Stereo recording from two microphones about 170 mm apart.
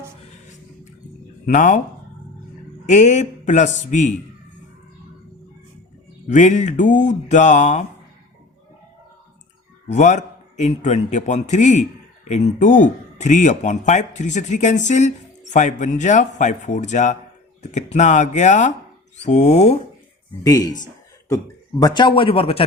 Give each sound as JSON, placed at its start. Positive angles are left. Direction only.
{"t": 1.5, "sound": "speech", "side_deg": 50}
{"t": 2.9, "sound": "speech", "side_deg": 45}
{"t": 6.2, "sound": "speech", "side_deg": 45}
{"t": 9.9, "sound": "speech", "side_deg": 45}
{"t": 20.4, "sound": "a man's voice", "side_deg": 20}